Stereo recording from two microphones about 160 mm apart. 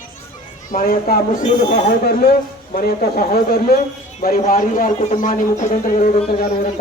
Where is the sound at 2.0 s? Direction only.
75° left (ahead or behind); by 6.0 s 55° left (ahead or behind).